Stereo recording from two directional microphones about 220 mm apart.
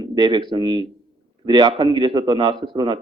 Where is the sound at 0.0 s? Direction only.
20° right (ahead or behind).